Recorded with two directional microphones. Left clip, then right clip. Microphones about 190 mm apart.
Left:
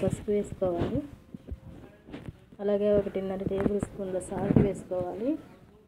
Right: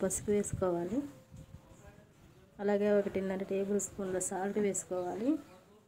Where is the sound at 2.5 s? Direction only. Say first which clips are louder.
Left 4 dB; 15° right (ahead or behind).